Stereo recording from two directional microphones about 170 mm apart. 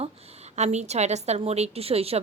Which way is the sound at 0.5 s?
40° right (ahead or behind).